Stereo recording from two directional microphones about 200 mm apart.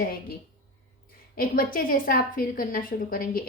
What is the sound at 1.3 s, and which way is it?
Speech, 45° left (ahead or behind).